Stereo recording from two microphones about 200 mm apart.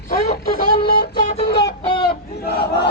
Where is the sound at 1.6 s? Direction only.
25° left (ahead or behind).